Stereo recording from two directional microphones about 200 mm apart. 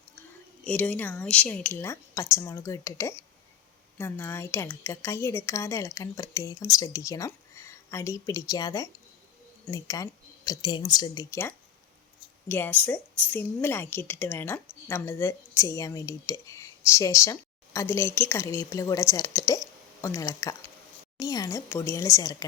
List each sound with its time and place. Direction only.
0.6 s a woman's voice: 5° left (ahead or behind)